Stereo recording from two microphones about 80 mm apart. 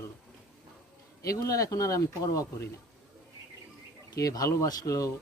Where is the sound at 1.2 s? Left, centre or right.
Left.